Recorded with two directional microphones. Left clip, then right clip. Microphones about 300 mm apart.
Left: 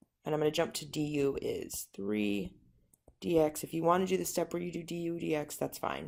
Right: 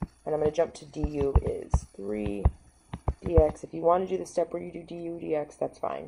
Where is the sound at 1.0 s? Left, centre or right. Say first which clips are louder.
Right 3 dB; left.